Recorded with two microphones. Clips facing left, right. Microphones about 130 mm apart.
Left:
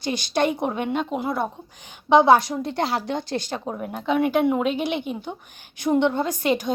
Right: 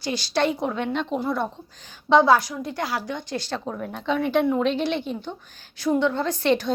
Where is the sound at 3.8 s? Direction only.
10° left (ahead or behind).